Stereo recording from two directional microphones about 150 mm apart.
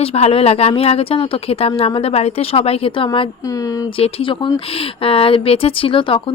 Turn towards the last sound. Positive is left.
turn(degrees=35)  # may be behind; listen again after turning